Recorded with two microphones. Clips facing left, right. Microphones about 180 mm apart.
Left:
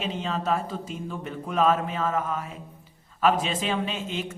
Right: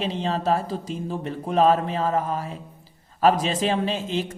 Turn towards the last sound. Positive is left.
turn(degrees=-35)  # may be behind; listen again after turning